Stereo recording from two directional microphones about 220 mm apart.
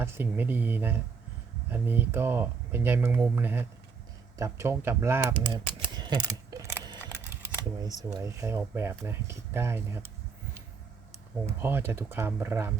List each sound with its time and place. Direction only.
0.0 s speech: 10° right (ahead or behind)
5.3 s typewriter: 20° right (ahead or behind)
8.1 s speech: 15° right (ahead or behind)
11.4 s speech: 10° right (ahead or behind)